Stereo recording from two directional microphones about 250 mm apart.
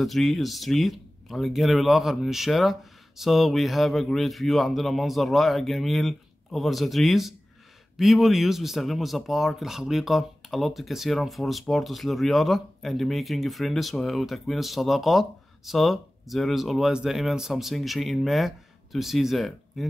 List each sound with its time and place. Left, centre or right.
0.0 s speech: centre